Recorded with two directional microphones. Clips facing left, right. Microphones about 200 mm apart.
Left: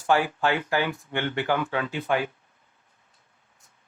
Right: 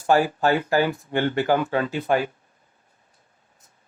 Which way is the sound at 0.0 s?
40° right (ahead or behind).